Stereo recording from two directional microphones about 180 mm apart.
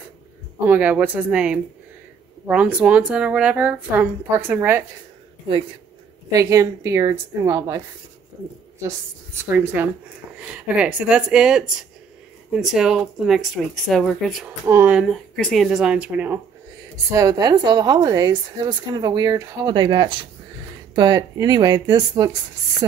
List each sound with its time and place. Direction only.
0.7 s speech: 10° right (ahead or behind)
6.3 s speech: 15° right (ahead or behind)
9.4 s speech: 10° right (ahead or behind)
14.7 s speech: 15° right (ahead or behind)
15.0 s speech: 5° left (ahead or behind); by 22.3 s 20° right (ahead or behind)